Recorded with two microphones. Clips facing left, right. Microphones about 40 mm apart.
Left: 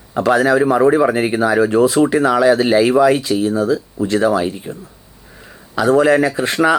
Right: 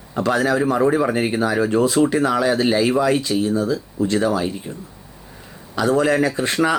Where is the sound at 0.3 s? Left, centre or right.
Centre.